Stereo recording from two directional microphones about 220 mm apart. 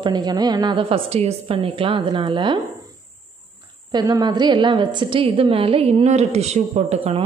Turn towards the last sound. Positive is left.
turn(degrees=-30)  # may be behind; listen again after turning